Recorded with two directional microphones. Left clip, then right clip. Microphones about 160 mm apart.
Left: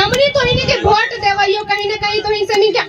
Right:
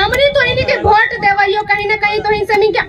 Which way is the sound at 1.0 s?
35° left (ahead or behind).